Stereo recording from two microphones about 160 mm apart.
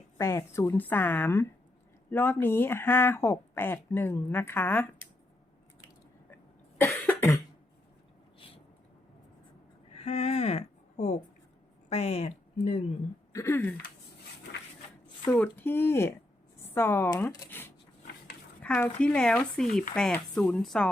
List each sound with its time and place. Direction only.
0.2 s speech: 20° left (ahead or behind)
6.3 s cough: 10° left (ahead or behind)
8.4 s a sound: 35° left (ahead or behind)
9.9 s speech: 40° left (ahead or behind)
13.3 s speech: 15° left (ahead or behind)
15.3 s speech: 10° left (ahead or behind)
16.6 s a sound: 15° left (ahead or behind)
18.6 s speech: 10° left (ahead or behind)